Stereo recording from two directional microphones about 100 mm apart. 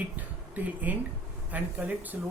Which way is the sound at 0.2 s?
15° right (ahead or behind).